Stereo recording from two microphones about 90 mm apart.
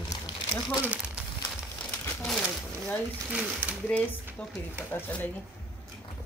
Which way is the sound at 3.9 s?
10° left (ahead or behind).